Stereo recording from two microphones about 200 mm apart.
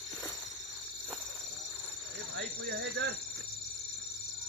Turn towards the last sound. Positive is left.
turn(degrees=-60)  # may be behind; listen again after turning